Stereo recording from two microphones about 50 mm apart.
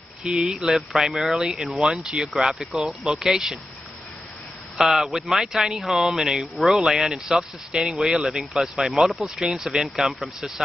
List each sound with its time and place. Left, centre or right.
0.2 s speech: centre
0.6 s speech: centre
4.7 s speech: centre